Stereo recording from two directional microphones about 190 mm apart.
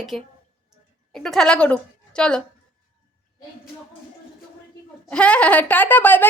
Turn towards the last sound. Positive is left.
turn(degrees=10)  # may be behind; listen again after turning